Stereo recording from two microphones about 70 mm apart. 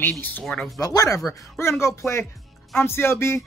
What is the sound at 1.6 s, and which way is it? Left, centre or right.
Speech, left.